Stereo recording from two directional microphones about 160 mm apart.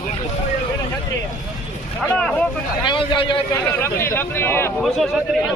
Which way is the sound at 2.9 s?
30° left (ahead or behind).